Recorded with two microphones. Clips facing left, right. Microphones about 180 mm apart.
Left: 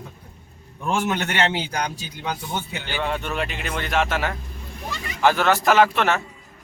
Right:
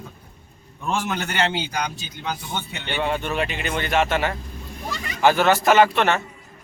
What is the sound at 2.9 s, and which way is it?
Speech, centre (ahead or behind).